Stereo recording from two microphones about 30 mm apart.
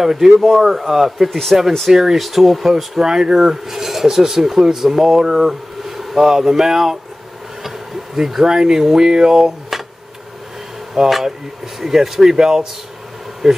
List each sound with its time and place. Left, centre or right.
0.0 s speech: centre
1.9 s speech: centre
2.1 s speech: centre
3.0 s speech: right
3.7 s speech: centre
8.2 s speech: centre
9.7 s a sound: centre
11.1 s speech: centre